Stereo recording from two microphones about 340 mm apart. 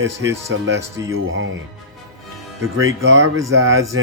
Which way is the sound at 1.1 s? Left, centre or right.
Right.